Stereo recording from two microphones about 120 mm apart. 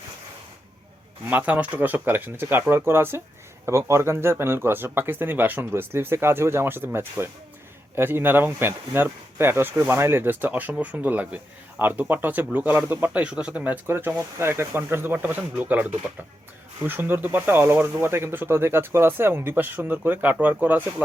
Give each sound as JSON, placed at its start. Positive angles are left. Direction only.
{"t": 1.2, "sound": "speech", "side_deg": -15}